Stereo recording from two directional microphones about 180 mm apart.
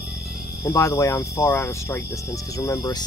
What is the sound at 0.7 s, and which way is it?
Speech, 15° left (ahead or behind).